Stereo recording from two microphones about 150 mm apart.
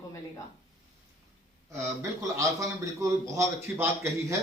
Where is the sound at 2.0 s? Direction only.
20° right (ahead or behind).